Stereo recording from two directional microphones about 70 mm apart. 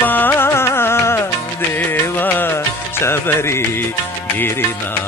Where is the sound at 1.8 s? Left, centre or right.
Left.